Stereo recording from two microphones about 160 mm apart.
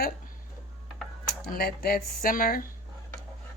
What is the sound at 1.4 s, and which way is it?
Speech, 65° left (ahead or behind).